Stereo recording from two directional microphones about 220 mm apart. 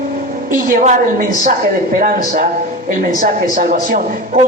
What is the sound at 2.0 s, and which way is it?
Speech, 40° right (ahead or behind).